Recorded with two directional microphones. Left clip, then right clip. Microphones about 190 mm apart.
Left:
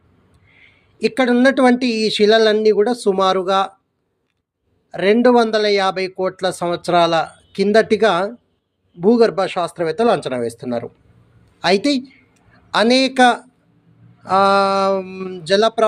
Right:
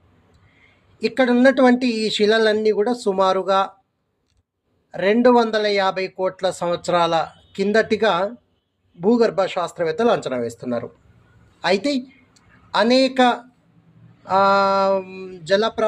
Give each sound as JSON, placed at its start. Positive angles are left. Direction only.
{"t": 0.6, "sound": "speech", "side_deg": 15}
{"t": 4.9, "sound": "speech", "side_deg": 15}